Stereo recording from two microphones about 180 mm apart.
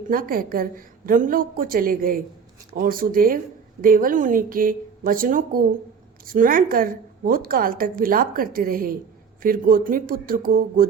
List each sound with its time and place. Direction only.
0.1 s a woman's voice: 50° right (ahead or behind)